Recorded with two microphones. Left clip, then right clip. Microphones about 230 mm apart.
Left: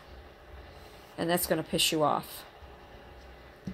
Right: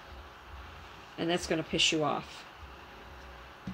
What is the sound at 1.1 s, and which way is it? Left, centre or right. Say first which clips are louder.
Speech: left 2 dB; left.